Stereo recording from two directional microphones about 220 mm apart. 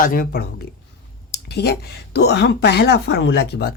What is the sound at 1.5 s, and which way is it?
Speech, 50° left (ahead or behind).